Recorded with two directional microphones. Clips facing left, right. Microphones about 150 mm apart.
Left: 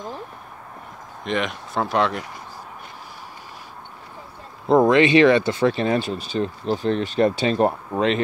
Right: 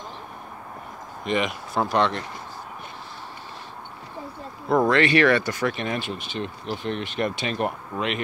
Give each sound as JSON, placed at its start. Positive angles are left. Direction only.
{"t": 1.2, "sound": "speech", "side_deg": 0}
{"t": 4.6, "sound": "speech", "side_deg": 20}